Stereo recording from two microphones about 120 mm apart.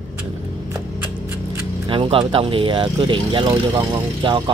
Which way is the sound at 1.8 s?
45° right (ahead or behind).